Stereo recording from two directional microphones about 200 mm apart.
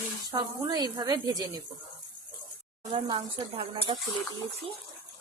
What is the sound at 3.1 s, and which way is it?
Speech, 25° right (ahead or behind).